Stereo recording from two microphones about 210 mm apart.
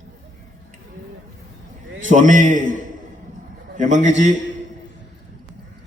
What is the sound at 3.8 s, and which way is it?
Speech, 35° right (ahead or behind).